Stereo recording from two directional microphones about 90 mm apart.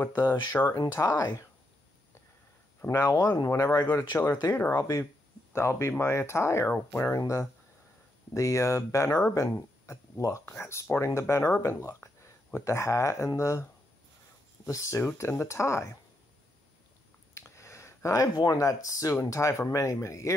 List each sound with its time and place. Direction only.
0.0 s speech: 30° left (ahead or behind)
0.9 s speech: 35° left (ahead or behind)
2.9 s speech: 35° left (ahead or behind)
11.8 s a sound: 35° left (ahead or behind)
12.6 s speech: 35° left (ahead or behind)
14.7 s speech: 35° left (ahead or behind)
17.3 s a sound: 30° left (ahead or behind)
18.5 s speech: 35° left (ahead or behind)